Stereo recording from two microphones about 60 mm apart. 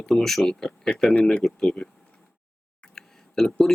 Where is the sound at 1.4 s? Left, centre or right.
Centre.